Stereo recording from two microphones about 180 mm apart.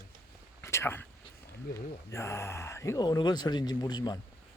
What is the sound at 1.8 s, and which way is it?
Speech, 15° left (ahead or behind).